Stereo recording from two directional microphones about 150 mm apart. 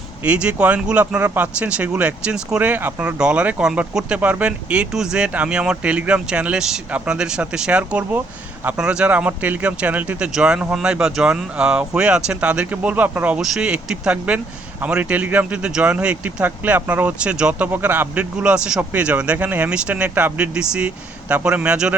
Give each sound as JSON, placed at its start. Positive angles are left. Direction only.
{"t": 0.3, "sound": "speech", "side_deg": -10}